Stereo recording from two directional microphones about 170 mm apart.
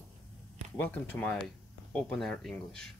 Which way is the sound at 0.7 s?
10° left (ahead or behind).